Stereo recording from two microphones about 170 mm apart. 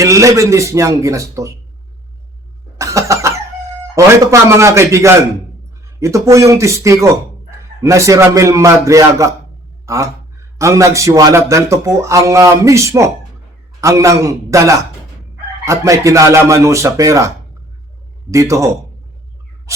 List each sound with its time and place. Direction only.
0.0 s speech: 20° right (ahead or behind)
2.7 s vehicle: 20° right (ahead or behind)
3.9 s speech: 15° right (ahead or behind)